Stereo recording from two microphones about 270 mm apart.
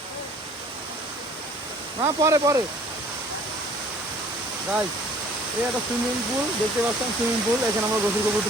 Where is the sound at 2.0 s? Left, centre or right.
Centre.